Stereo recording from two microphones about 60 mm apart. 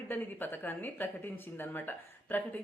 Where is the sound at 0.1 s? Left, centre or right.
Left.